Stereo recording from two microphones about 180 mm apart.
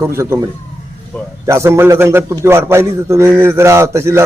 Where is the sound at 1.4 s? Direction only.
15° right (ahead or behind).